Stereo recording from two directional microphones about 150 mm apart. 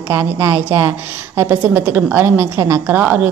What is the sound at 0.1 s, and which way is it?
A woman's voice, 20° right (ahead or behind).